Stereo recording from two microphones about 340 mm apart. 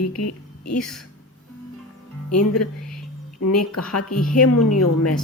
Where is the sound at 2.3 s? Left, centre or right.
Left.